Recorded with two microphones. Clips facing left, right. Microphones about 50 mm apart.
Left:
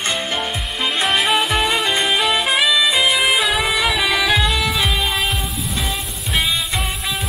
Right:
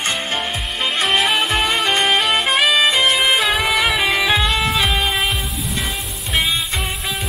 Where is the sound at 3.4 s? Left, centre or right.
Centre.